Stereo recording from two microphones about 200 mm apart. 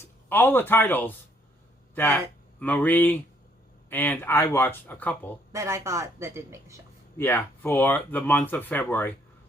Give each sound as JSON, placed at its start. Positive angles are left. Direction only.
{"t": 0.0, "sound": "speech", "side_deg": 10}
{"t": 5.5, "sound": "speech", "side_deg": -15}
{"t": 7.2, "sound": "speech", "side_deg": 10}